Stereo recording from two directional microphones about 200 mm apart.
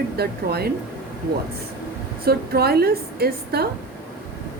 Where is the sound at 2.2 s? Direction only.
50° right (ahead or behind).